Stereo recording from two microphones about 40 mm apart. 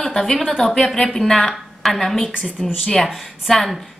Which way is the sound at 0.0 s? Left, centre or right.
Centre.